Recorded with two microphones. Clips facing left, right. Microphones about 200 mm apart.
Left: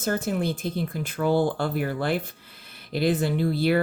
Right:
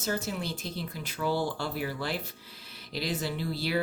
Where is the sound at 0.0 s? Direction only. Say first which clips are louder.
Left 7 dB; 55° left (ahead or behind).